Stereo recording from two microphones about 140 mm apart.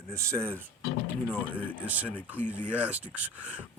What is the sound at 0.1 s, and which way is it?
Speech, 20° right (ahead or behind).